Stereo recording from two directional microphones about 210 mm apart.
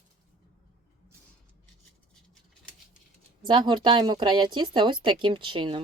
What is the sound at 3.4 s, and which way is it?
Speech, 20° right (ahead or behind).